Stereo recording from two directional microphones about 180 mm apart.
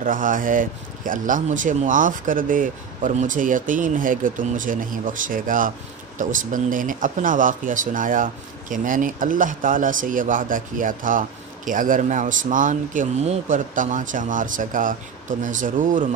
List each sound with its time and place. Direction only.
0.0 s speech: 50° right (ahead or behind)